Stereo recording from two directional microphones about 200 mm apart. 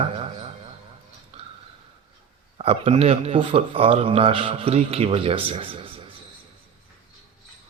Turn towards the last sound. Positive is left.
turn(degrees=-25)  # may be behind; listen again after turning